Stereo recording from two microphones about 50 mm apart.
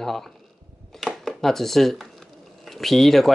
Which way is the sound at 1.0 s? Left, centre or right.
Centre.